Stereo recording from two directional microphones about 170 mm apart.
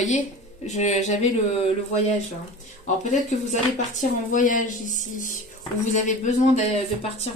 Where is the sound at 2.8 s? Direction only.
45° left (ahead or behind).